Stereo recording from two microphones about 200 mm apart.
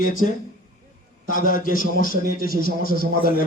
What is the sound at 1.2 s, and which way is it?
A man's voice, 45° left (ahead or behind).